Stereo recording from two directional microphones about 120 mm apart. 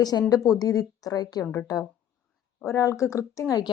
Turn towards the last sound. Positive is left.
turn(degrees=25)  # may be behind; listen again after turning